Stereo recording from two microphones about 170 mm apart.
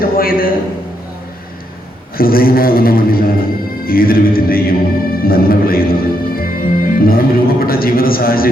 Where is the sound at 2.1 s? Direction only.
60° left (ahead or behind).